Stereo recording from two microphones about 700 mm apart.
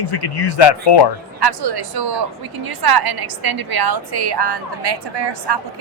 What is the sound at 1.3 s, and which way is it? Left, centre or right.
A woman's voice, right.